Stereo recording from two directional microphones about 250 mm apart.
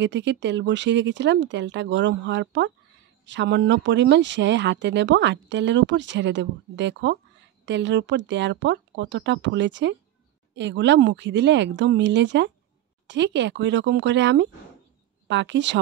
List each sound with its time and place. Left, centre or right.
0.0 s speech: right